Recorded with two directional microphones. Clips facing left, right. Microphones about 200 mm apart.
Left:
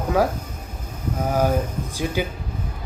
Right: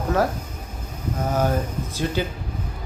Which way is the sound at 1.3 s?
10° left (ahead or behind).